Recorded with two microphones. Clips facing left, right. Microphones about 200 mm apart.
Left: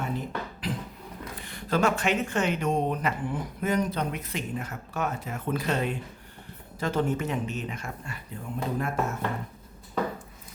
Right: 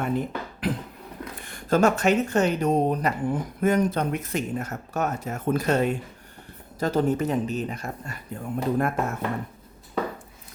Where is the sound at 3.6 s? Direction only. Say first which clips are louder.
Right 5 dB; 50° right (ahead or behind).